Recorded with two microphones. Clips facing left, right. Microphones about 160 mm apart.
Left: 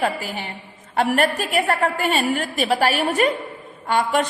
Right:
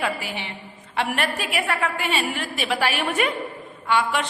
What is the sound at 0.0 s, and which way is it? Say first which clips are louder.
A woman's voice: left 4 dB; 40° left (ahead or behind).